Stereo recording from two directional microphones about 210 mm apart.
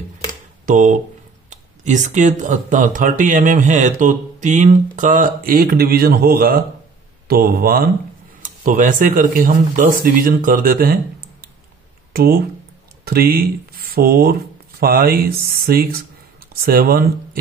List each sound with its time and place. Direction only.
0.7 s speech: 40° right (ahead or behind)
12.1 s speech: 45° right (ahead or behind)